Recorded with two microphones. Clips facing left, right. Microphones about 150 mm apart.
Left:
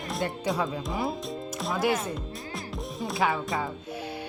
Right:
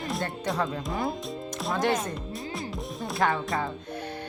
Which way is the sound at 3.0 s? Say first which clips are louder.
Right 1 dB; centre (ahead or behind).